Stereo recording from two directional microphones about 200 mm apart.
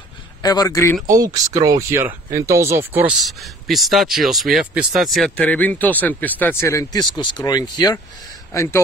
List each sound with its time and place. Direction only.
0.4 s speech: 20° left (ahead or behind)
1.0 s speech: 20° right (ahead or behind); by 7.8 s 20° left (ahead or behind)